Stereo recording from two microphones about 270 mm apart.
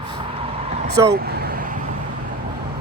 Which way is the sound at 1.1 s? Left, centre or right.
Right.